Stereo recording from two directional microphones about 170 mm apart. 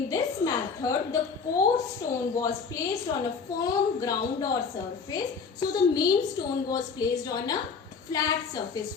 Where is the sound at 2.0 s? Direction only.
50° left (ahead or behind).